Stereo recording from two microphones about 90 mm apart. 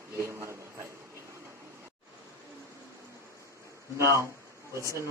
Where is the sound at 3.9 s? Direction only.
30° right (ahead or behind).